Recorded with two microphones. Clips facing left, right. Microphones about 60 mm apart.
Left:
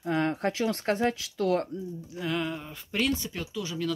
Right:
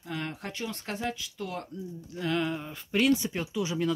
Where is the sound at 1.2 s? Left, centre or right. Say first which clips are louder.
Left 10 dB; left.